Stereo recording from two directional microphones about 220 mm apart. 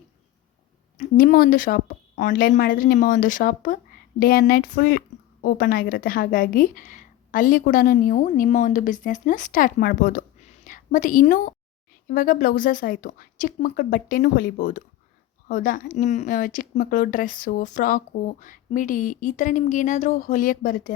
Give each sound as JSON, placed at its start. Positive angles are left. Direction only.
{"t": 0.9, "sound": "a woman's voice", "side_deg": 40}